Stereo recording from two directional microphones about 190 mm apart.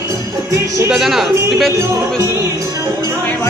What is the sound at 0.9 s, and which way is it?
Speech, centre (ahead or behind).